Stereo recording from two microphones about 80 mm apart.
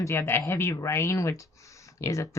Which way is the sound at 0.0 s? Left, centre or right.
Left.